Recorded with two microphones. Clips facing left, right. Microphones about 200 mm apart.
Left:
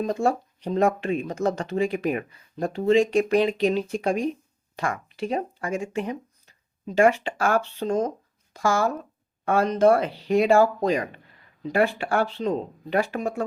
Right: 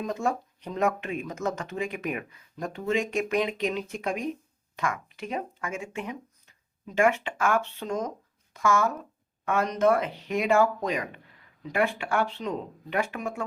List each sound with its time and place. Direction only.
0.0 s speech: 30° left (ahead or behind)